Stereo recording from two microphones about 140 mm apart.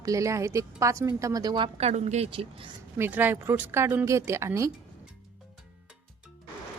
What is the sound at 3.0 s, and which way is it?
Speech, 15° right (ahead or behind).